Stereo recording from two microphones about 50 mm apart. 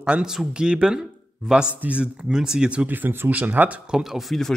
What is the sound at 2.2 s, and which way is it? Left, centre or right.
Speech, centre.